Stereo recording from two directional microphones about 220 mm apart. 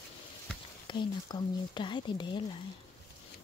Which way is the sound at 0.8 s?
20° left (ahead or behind).